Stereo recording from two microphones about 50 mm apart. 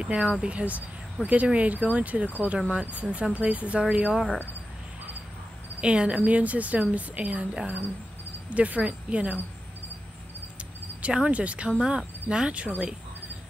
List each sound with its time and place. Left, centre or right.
0.0 s a woman's voice: right
5.8 s a woman's voice: right
10.6 s cricket: right
11.2 s a woman's voice: right